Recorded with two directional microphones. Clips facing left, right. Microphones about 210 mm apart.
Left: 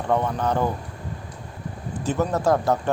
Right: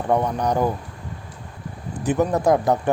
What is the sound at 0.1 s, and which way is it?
Speech, 15° right (ahead or behind).